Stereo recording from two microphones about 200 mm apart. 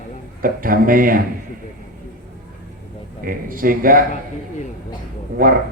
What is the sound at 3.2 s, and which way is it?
Speech, 45° right (ahead or behind).